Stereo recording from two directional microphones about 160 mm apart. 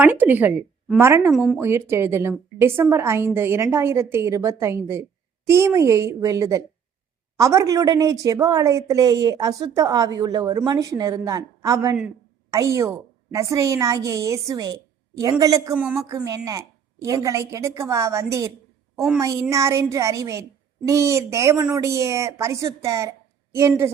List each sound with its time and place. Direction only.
0.0 s a woman's voice: 10° right (ahead or behind)
1.3 s a woman's voice: centre (ahead or behind)
1.5 s a woman's voice: 15° right (ahead or behind)
15.8 s a woman's voice: 5° right (ahead or behind)
16.0 s a woman's voice: 20° right (ahead or behind)
18.9 s a woman's voice: 5° right (ahead or behind)
19.2 s a woman's voice: 20° right (ahead or behind)